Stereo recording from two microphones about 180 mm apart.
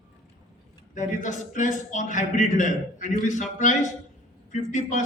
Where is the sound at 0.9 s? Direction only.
45° left (ahead or behind).